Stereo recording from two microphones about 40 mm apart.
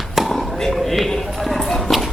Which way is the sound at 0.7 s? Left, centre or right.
Centre.